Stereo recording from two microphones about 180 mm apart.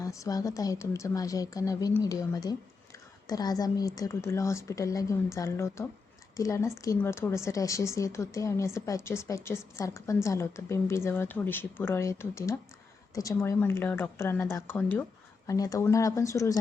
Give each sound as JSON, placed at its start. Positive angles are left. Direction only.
{"t": 0.0, "sound": "a woman's voice", "side_deg": 20}